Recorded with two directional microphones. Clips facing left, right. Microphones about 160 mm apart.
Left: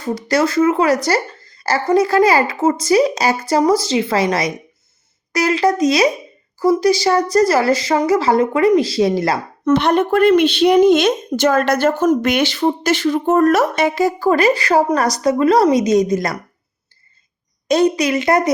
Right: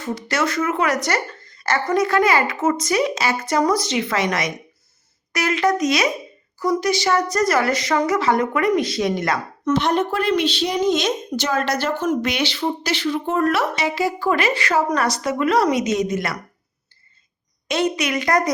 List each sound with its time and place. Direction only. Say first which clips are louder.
0.0 s speech: left 6 dB; 35° left (ahead or behind)
9.6 s speech: left 5 dB; 60° left (ahead or behind); by 16.4 s 40° left (ahead or behind)
17.7 s speech: left 7 dB; 35° left (ahead or behind)